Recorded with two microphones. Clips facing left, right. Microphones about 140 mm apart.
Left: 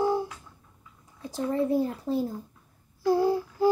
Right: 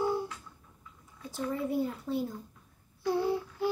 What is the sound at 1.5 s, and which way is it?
Speech, 90° left.